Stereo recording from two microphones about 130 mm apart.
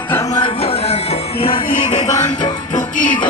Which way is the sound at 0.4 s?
50° left (ahead or behind).